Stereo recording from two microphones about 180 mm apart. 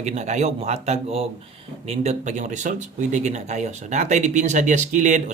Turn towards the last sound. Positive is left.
turn(degrees=-45)  # may be behind; listen again after turning